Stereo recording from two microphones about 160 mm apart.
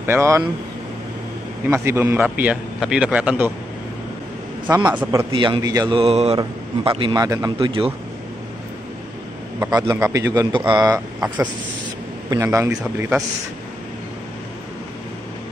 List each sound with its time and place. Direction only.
0.0 s a man's voice: 15° right (ahead or behind)
1.7 s a man's voice: 15° right (ahead or behind)
4.6 s a man's voice: 10° right (ahead or behind)
5.3 s a man's voice: 30° right (ahead or behind)
5.9 s a man's voice: 40° right (ahead or behind); by 7.5 s 20° right (ahead or behind)
7.5 s a man's voice: 35° right (ahead or behind)
9.7 s a man's voice: 20° right (ahead or behind)
12.3 s a man's voice: 20° right (ahead or behind)